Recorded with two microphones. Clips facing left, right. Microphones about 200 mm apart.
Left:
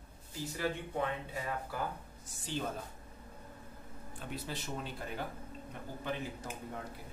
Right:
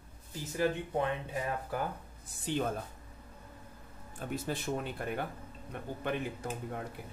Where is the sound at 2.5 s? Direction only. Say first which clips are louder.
Right 6 dB; 60° right (ahead or behind).